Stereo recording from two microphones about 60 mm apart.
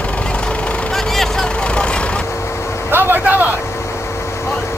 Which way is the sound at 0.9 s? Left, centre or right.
Centre.